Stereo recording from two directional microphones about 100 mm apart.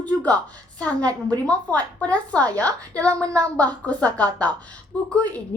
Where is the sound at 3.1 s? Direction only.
35° right (ahead or behind).